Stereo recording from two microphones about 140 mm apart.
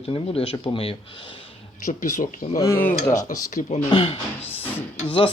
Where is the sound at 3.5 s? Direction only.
65° left (ahead or behind).